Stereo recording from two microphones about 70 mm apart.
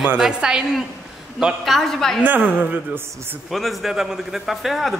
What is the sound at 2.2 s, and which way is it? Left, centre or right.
A woman's voice, right.